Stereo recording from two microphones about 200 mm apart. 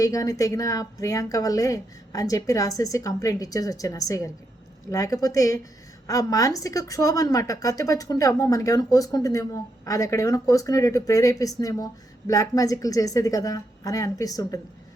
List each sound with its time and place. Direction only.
0.0 s a woman's voice: 15° left (ahead or behind)